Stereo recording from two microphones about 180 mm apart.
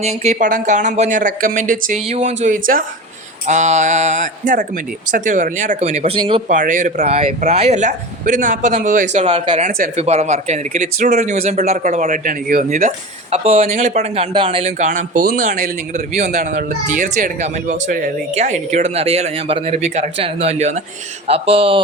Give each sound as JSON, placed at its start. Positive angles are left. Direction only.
{"t": 0.0, "sound": "a man's voice", "side_deg": -35}
{"t": 6.5, "sound": "a man's voice", "side_deg": -45}
{"t": 10.0, "sound": "a man's voice", "side_deg": -35}
{"t": 13.3, "sound": "a man's voice", "side_deg": -35}